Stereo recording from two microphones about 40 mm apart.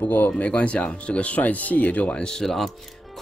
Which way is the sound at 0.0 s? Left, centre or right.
Left.